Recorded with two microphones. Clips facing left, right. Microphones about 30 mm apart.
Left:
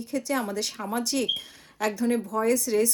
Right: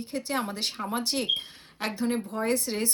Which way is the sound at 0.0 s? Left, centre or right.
Right.